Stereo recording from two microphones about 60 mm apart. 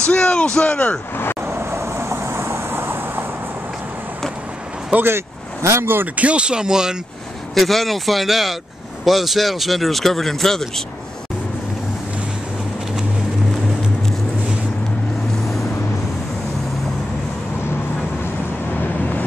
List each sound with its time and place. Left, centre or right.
0.1 s speech: centre
1.4 s vehicle: right
5.0 s speech: right
6.1 s speech: right
7.5 s speech: centre
18.2 s vehicle: left